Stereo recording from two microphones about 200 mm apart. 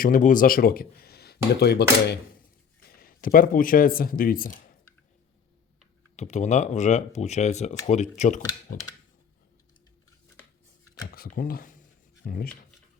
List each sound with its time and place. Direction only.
0.0 s speech: 40° left (ahead or behind)
6.1 s speech: 35° left (ahead or behind)
11.1 s speech: 45° left (ahead or behind)